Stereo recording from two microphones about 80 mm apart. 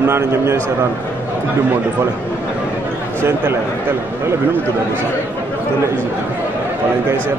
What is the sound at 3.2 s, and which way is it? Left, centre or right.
A man's voice, right.